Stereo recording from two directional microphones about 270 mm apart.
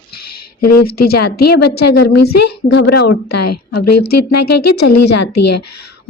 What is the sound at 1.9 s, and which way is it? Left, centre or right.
A woman's voice, left.